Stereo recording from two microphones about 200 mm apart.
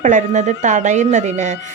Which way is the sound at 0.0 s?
40° right (ahead or behind).